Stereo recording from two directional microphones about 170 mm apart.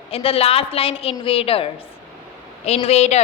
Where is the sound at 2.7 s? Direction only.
40° left (ahead or behind).